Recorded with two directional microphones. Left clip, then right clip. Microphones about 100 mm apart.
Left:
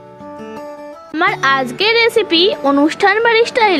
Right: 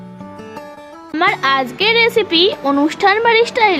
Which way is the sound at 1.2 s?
35° left (ahead or behind).